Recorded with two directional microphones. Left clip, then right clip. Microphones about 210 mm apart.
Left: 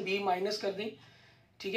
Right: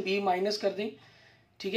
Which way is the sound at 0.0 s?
50° right (ahead or behind).